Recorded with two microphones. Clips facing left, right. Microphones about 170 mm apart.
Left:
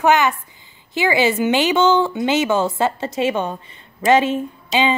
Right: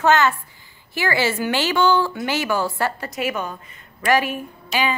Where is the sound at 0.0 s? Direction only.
15° left (ahead or behind).